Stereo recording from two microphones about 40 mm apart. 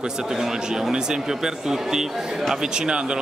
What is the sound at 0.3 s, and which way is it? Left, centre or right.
Speech, centre.